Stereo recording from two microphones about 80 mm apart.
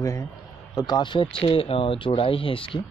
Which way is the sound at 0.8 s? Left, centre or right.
Left.